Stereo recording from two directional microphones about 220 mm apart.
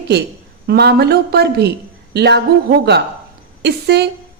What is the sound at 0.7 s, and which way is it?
A woman's voice, 45° right (ahead or behind).